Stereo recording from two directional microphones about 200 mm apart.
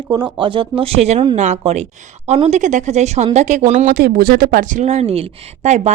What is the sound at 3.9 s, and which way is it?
A woman's voice, 50° right (ahead or behind).